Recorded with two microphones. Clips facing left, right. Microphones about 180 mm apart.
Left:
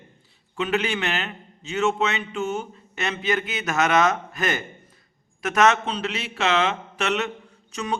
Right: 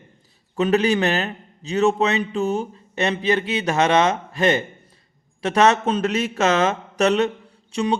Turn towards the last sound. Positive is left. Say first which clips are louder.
# right 6 dB
turn(degrees=-30)  # may be behind; listen again after turning